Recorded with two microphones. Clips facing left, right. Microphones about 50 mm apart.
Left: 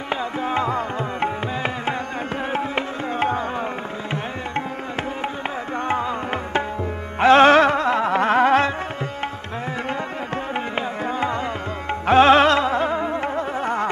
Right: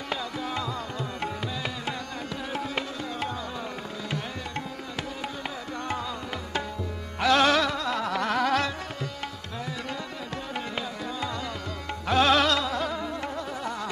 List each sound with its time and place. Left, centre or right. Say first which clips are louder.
0.1 s music: left 8 dB; left
5.9 s music: left 9 dB; left
11.1 s music: left 9 dB; left